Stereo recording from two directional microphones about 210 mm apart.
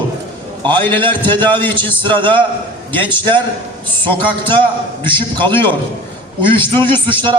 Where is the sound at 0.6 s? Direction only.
20° right (ahead or behind).